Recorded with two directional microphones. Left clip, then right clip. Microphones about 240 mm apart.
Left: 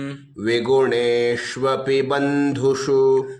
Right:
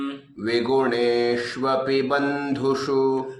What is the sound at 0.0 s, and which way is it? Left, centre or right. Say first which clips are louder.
Mantra: left 3 dB; left.